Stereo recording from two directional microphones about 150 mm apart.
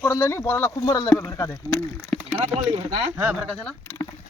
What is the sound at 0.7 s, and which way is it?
Speech, 30° left (ahead or behind).